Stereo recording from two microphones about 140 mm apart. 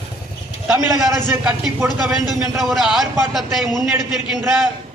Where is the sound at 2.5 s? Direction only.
Centre (ahead or behind).